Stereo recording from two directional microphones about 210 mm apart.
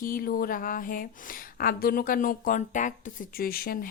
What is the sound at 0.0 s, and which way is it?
Speech, 45° left (ahead or behind).